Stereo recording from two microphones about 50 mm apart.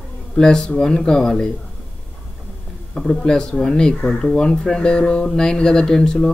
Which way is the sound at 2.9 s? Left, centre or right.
Centre.